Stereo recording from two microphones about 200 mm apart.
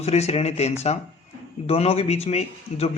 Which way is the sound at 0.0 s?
30° left (ahead or behind).